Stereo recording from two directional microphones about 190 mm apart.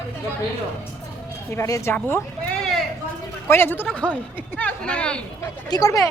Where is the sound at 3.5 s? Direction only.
10° left (ahead or behind).